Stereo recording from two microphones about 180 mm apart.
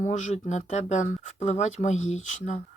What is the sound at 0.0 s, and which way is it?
Speech, 45° left (ahead or behind).